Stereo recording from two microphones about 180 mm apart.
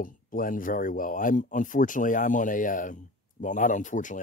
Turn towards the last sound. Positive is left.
turn(degrees=45)  # may be behind; listen again after turning